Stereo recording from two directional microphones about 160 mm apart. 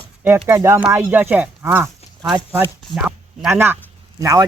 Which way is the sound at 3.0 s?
5° right (ahead or behind).